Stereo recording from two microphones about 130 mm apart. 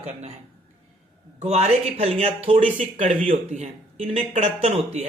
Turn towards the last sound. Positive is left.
turn(degrees=-55)  # may be behind; listen again after turning